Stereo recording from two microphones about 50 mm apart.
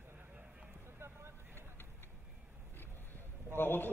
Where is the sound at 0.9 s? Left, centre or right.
Right.